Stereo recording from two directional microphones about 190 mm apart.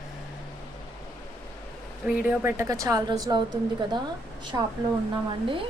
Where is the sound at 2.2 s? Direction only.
10° right (ahead or behind).